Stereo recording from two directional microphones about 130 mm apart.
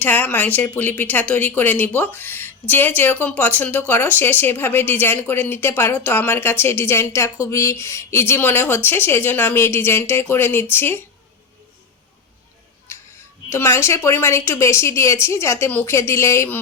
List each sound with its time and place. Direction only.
0.0 s speech: 15° left (ahead or behind)
12.9 s music: 20° left (ahead or behind)
13.5 s a woman's voice: 20° left (ahead or behind)